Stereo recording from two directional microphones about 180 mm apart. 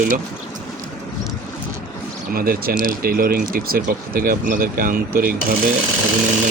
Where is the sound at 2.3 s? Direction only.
55° right (ahead or behind).